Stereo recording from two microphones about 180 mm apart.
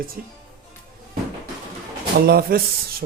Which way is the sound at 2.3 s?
55° right (ahead or behind).